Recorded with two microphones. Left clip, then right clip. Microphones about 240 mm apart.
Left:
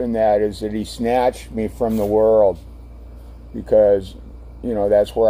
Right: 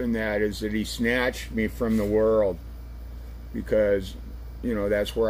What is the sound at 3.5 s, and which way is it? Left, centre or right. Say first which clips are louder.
Speech: left 9 dB; centre.